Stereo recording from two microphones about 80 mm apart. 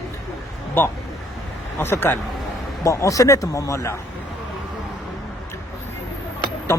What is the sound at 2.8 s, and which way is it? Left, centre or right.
Speech, left.